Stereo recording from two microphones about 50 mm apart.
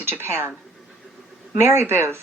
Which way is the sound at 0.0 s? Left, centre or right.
Right.